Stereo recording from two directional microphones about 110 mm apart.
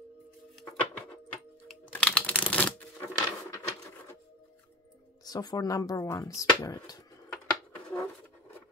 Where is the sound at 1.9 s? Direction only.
10° left (ahead or behind).